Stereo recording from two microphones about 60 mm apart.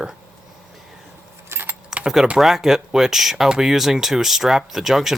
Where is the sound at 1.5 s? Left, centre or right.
Right.